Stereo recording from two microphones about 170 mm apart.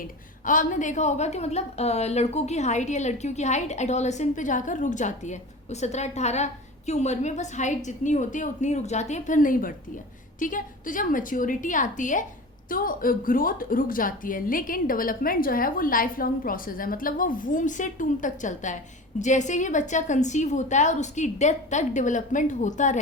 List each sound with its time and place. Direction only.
0.4 s a woman's voice: 50° left (ahead or behind)